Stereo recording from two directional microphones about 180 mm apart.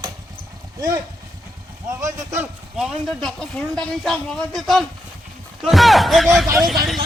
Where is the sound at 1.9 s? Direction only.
15° right (ahead or behind).